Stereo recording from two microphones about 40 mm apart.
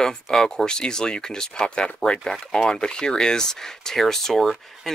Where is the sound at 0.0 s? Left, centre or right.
Centre.